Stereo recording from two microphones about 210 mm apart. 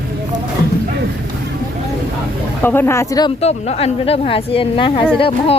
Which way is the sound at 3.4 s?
30° left (ahead or behind).